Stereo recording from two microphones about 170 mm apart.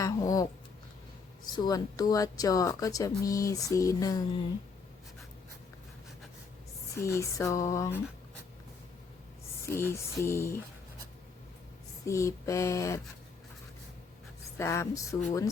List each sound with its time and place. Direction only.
0.0 s a sound: 20° left (ahead or behind)
1.5 s speech: 25° left (ahead or behind)
6.9 s speech: 15° left (ahead or behind)
9.6 s speech: 15° left (ahead or behind)
12.0 s speech: 15° left (ahead or behind)
14.6 s speech: 15° left (ahead or behind)